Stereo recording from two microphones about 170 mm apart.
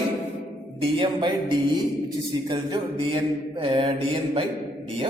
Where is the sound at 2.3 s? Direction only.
25° right (ahead or behind).